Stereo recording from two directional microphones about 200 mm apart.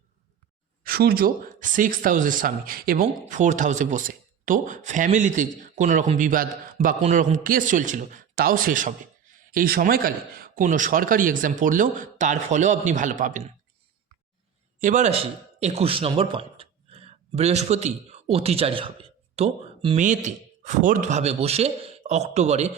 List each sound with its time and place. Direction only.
0.9 s speech: 50° right (ahead or behind)
14.8 s speech: 40° right (ahead or behind)
20.0 s speech: 40° right (ahead or behind)